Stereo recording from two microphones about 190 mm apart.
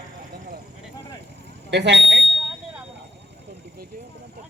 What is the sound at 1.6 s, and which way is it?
Speech, 65° right (ahead or behind).